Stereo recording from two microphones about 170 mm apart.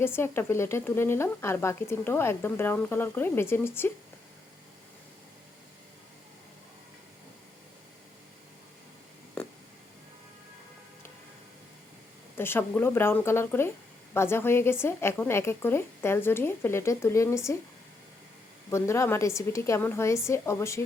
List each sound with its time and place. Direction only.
0.0 s speech: 15° left (ahead or behind)
9.4 s a sound: 10° left (ahead or behind)
12.4 s speech: 15° left (ahead or behind)
18.7 s speech: 15° left (ahead or behind)